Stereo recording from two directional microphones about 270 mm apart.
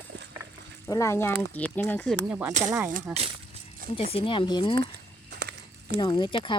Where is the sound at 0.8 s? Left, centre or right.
Centre.